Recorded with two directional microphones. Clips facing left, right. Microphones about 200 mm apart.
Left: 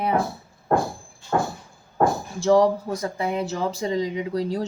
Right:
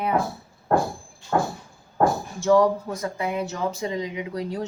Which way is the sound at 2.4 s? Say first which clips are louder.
Left 1 dB; 30° left (ahead or behind).